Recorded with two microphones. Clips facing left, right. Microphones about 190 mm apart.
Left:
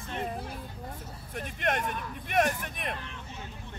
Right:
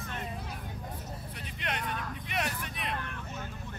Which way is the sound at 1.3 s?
50° left (ahead or behind).